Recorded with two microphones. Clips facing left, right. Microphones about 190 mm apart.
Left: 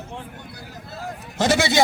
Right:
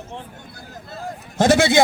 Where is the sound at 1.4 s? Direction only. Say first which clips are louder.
Right 4 dB; 50° right (ahead or behind).